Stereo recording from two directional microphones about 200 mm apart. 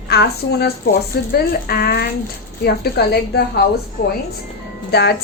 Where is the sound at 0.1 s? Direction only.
55° left (ahead or behind).